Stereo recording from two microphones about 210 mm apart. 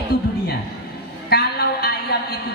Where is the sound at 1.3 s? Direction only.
50° left (ahead or behind).